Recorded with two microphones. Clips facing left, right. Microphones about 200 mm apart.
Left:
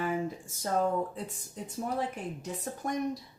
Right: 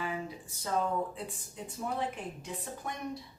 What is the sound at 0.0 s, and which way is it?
A woman's voice, 45° left (ahead or behind).